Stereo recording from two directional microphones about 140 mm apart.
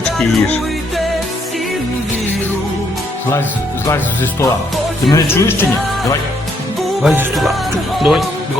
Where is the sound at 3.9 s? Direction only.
20° left (ahead or behind).